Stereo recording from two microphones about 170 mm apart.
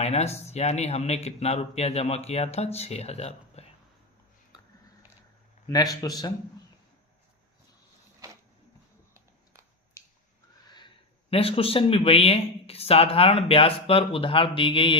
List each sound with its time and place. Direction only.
0.0 s speech: 40° left (ahead or behind)
5.6 s a man's voice: 20° left (ahead or behind)
10.0 s a sound: 15° left (ahead or behind)
10.8 s speech: 30° left (ahead or behind)